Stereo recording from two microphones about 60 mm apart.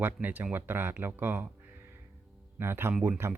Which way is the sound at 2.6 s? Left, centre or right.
Right.